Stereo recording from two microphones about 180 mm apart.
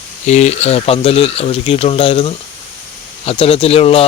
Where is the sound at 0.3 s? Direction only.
40° left (ahead or behind).